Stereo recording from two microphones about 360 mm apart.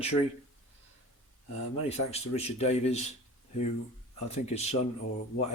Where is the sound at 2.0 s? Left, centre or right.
Centre.